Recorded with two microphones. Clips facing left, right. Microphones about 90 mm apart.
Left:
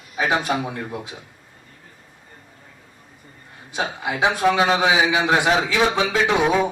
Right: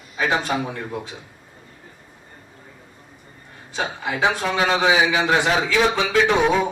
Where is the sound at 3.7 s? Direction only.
15° left (ahead or behind).